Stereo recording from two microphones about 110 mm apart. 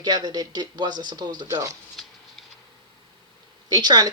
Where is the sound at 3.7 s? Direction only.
40° right (ahead or behind).